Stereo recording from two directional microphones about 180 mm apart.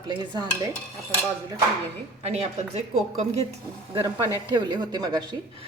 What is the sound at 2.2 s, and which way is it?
Speech, 35° right (ahead or behind).